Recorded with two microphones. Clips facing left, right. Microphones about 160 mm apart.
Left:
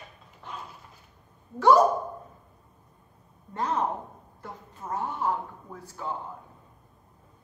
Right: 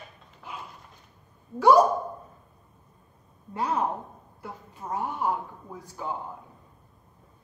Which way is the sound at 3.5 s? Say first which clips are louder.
Right 1 dB; 10° right (ahead or behind).